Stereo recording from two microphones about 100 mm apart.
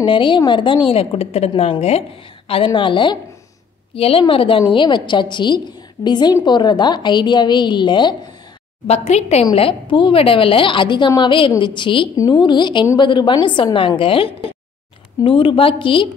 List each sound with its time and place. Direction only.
0.0 s a woman's voice: 60° left (ahead or behind)
3.9 s a woman's voice: 70° left (ahead or behind); by 8.2 s 50° left (ahead or behind)
8.8 s a woman's voice: 90° left
9.6 s a woman's voice: 60° left (ahead or behind)